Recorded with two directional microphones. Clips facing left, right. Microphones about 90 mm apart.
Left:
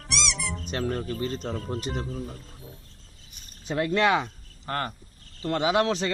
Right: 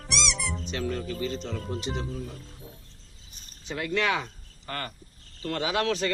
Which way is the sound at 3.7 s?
35° left (ahead or behind).